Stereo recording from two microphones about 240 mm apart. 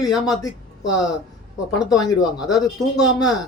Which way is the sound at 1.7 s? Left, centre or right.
Centre.